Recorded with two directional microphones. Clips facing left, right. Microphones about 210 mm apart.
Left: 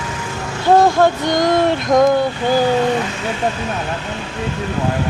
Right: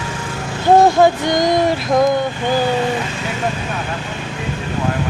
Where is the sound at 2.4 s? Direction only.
10° left (ahead or behind).